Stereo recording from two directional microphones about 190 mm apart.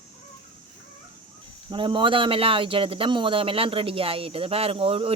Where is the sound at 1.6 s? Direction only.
25° right (ahead or behind).